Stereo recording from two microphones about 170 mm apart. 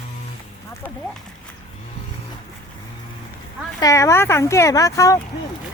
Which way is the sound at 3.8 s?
20° left (ahead or behind).